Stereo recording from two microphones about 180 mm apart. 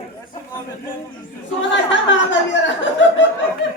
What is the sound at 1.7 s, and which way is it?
Speech, 90° left.